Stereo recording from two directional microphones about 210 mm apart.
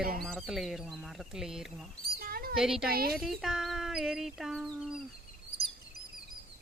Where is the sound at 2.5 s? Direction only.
5° right (ahead or behind).